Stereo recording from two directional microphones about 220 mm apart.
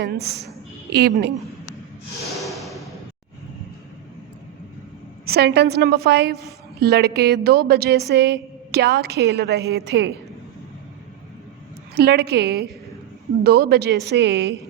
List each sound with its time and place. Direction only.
0.0 s a woman's voice: 45° right (ahead or behind)
2.4 s music: centre (ahead or behind)
5.2 s a woman's voice: 45° right (ahead or behind)
11.9 s a woman's voice: 45° right (ahead or behind)